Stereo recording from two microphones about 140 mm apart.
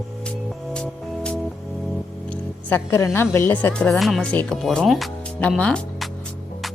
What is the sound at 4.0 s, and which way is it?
Speech, centre (ahead or behind).